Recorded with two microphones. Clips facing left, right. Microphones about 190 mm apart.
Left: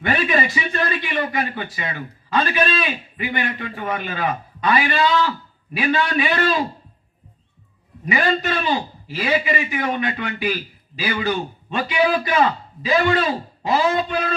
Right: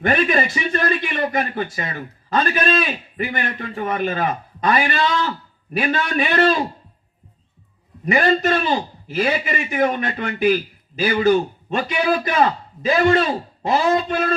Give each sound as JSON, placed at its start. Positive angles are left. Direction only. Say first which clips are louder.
{"t": 0.0, "sound": "a man's voice", "louder": "right 2 dB", "side_deg": -45}
{"t": 8.0, "sound": "a man's voice", "louder": "right 4 dB", "side_deg": -45}